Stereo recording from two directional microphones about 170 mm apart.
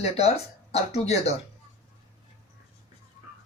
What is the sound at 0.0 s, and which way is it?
Speech, 35° left (ahead or behind).